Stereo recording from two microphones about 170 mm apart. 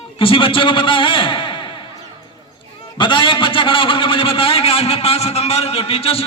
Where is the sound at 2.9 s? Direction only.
30° left (ahead or behind).